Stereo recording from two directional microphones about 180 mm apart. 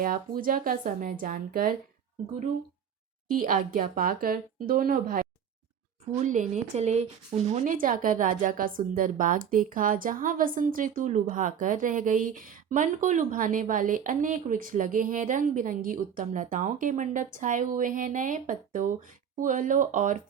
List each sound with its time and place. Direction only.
0.0 s a woman's voice: 50° right (ahead or behind)
3.2 s a woman's voice: 50° right (ahead or behind)